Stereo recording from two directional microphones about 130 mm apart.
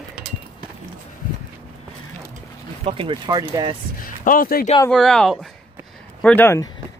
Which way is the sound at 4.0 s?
90° left.